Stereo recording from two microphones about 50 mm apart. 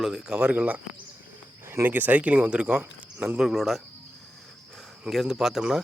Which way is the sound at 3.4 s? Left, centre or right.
Centre.